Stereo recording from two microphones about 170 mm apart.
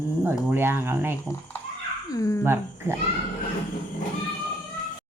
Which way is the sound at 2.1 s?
20° left (ahead or behind).